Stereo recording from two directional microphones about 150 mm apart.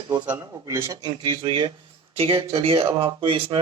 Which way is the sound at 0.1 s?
15° right (ahead or behind).